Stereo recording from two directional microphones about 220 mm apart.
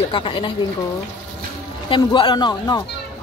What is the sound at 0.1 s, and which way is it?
Speech, 25° left (ahead or behind).